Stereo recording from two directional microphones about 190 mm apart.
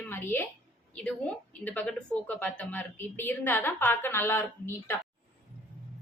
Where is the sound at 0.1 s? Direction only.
10° left (ahead or behind).